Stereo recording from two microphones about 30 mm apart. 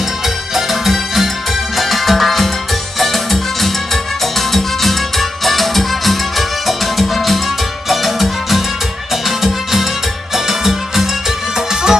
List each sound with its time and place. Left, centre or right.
0.6 s music: centre